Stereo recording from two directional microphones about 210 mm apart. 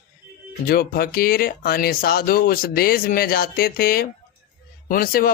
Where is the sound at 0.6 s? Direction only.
45° left (ahead or behind).